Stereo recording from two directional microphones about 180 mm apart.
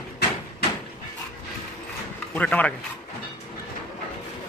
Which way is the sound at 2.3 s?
10° left (ahead or behind).